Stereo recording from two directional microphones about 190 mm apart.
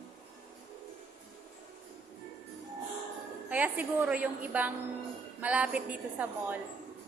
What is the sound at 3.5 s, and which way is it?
A woman's voice, 10° right (ahead or behind).